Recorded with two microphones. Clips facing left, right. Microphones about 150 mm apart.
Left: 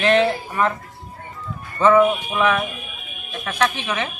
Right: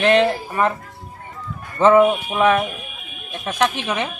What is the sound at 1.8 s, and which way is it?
Speech, 20° right (ahead or behind).